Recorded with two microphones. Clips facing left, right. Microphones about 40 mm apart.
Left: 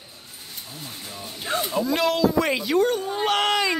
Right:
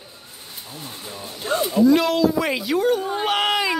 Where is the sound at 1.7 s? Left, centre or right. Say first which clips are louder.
Right 7 dB; centre.